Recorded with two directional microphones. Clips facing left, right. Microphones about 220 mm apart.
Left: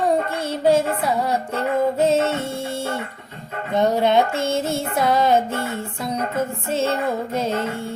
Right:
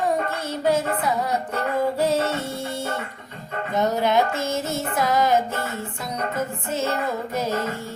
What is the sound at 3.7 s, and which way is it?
Music, 30° left (ahead or behind).